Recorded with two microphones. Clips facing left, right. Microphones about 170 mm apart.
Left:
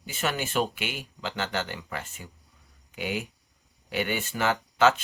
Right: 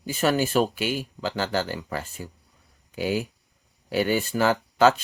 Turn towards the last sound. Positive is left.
turn(degrees=-35)  # may be behind; listen again after turning